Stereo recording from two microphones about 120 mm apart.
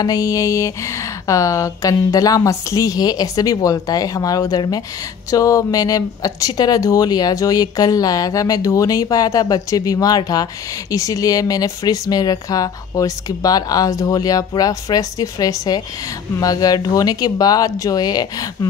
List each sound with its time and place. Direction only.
0.0 s speech: 30° left (ahead or behind)